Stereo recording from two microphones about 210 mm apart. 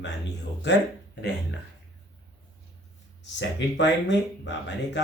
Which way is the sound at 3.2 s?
55° left (ahead or behind).